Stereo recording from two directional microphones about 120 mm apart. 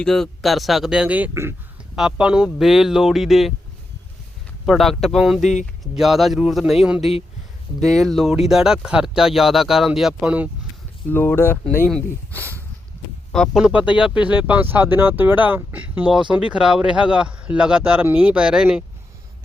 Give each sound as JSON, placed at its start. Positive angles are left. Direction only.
{"t": 0.0, "sound": "speech", "side_deg": 5}
{"t": 4.6, "sound": "speech", "side_deg": 0}
{"t": 11.1, "sound": "speech", "side_deg": 15}
{"t": 13.3, "sound": "speech", "side_deg": 0}